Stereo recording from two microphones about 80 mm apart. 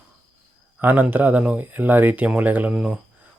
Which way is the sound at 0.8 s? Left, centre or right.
Right.